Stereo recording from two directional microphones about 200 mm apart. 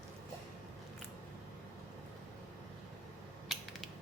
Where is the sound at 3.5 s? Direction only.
Centre (ahead or behind).